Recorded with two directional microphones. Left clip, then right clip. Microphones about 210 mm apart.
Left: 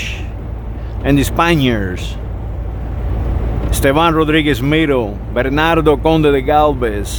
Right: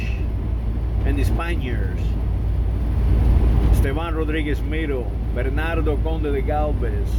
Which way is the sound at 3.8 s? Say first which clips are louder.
Left 17 dB; 50° left (ahead or behind).